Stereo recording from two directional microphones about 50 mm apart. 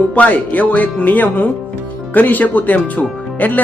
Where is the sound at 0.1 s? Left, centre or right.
Left.